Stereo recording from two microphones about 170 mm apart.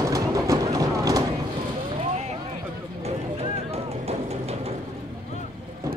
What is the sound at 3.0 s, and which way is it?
Vehicle, 40° right (ahead or behind).